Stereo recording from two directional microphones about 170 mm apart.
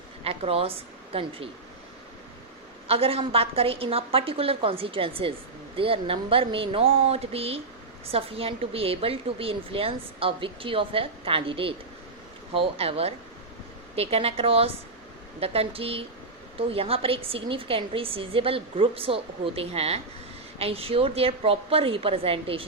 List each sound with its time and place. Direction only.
0.3 s a woman's voice: 35° right (ahead or behind)
2.8 s speech: 35° right (ahead or behind)